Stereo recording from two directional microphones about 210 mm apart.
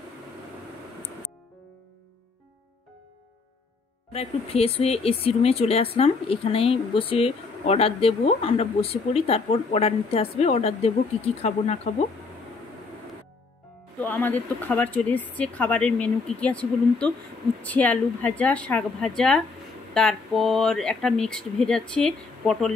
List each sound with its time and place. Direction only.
4.1 s speech: 30° left (ahead or behind)
14.0 s speech: 10° left (ahead or behind)